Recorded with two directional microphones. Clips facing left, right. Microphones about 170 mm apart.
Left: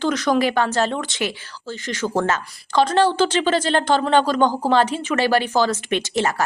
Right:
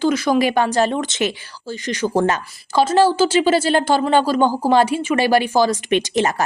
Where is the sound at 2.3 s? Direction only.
5° right (ahead or behind).